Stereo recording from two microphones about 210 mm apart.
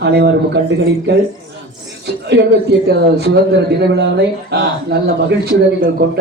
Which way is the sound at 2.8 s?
55° right (ahead or behind).